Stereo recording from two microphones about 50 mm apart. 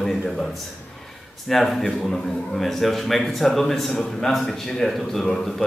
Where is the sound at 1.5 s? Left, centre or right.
Centre.